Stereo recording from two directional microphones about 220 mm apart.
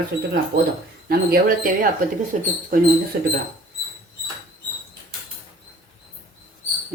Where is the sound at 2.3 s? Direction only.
35° right (ahead or behind).